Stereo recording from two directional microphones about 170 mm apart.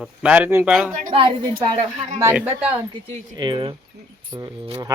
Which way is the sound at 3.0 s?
30° right (ahead or behind).